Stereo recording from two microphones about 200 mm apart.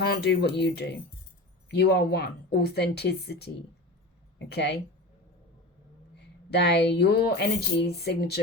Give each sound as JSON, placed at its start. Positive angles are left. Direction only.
{"t": 0.0, "sound": "speech", "side_deg": 55}
{"t": 6.5, "sound": "speech", "side_deg": 55}